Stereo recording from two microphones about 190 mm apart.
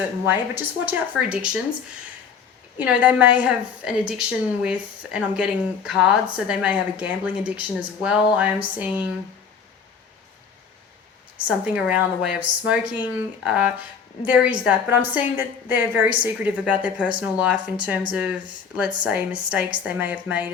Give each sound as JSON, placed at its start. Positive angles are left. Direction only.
{"t": 0.3, "sound": "a woman's voice", "side_deg": -10}
{"t": 2.7, "sound": "a woman's voice", "side_deg": -10}
{"t": 11.4, "sound": "a woman's voice", "side_deg": -5}